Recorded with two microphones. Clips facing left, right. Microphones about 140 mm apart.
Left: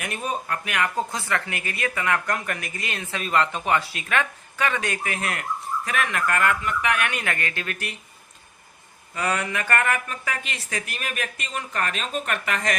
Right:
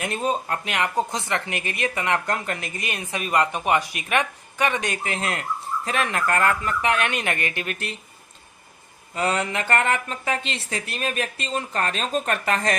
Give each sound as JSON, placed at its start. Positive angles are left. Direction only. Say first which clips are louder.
{"t": 0.0, "sound": "speech", "louder": "right 4 dB", "side_deg": -25}
{"t": 9.1, "sound": "speech", "louder": "right 2 dB", "side_deg": -25}